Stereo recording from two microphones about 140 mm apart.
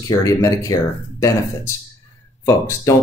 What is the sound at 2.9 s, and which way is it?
Speech, 20° left (ahead or behind).